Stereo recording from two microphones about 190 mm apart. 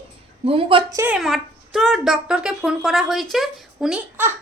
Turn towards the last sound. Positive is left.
turn(degrees=-5)  # may be behind; listen again after turning